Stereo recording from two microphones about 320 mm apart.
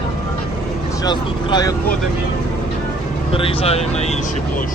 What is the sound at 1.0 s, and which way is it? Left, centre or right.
Speech, centre.